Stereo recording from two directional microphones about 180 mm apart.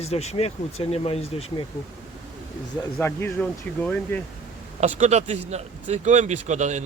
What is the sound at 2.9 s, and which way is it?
Speech, 10° left (ahead or behind).